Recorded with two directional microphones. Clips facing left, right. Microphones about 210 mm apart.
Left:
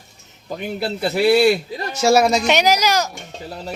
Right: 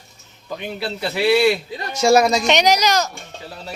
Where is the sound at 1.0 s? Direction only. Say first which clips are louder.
Left 2 dB; 45° left (ahead or behind).